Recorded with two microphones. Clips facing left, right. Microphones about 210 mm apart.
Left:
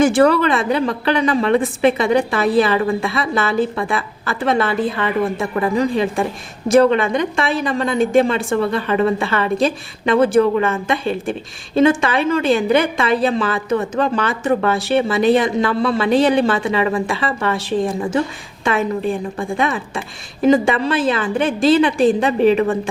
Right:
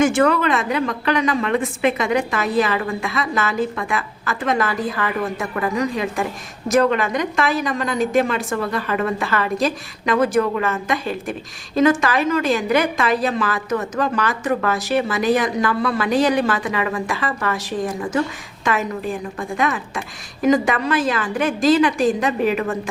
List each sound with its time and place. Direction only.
0.0 s a woman's voice: 35° left (ahead or behind)